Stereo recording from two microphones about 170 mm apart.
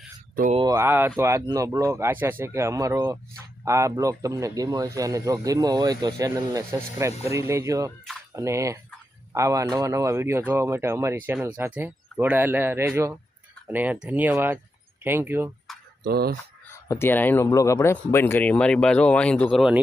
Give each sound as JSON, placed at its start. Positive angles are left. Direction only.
{"t": 0.7, "sound": "speech", "side_deg": -15}
{"t": 16.0, "sound": "speech", "side_deg": -65}
{"t": 16.7, "sound": "speech", "side_deg": 15}